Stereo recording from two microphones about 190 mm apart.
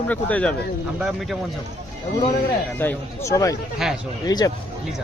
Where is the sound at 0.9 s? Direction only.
5° right (ahead or behind).